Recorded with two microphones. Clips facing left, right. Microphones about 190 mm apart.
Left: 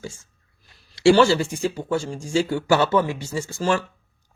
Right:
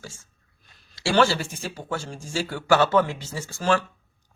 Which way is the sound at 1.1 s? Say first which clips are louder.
Right 1 dB; 15° left (ahead or behind).